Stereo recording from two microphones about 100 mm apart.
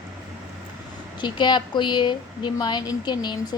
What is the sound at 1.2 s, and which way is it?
Speech, 50° left (ahead or behind).